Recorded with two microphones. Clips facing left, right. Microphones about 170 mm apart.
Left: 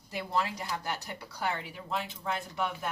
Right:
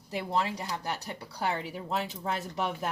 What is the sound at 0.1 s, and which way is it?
Speech, 25° right (ahead or behind).